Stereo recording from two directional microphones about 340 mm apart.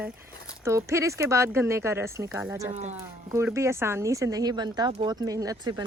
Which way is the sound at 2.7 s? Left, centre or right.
Centre.